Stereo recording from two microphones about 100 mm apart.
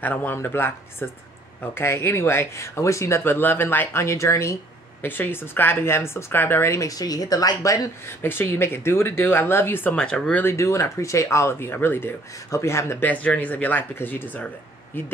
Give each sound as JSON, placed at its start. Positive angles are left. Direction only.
{"t": 0.0, "sound": "speech", "side_deg": 15}
{"t": 5.0, "sound": "speech", "side_deg": 20}
{"t": 9.9, "sound": "speech", "side_deg": 10}
{"t": 10.4, "sound": "speech", "side_deg": 25}
{"t": 13.1, "sound": "speech", "side_deg": 15}